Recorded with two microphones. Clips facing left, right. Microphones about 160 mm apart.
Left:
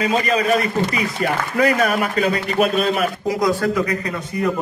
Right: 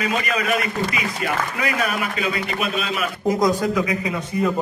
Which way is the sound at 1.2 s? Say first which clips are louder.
Left 7 dB; 45° left (ahead or behind).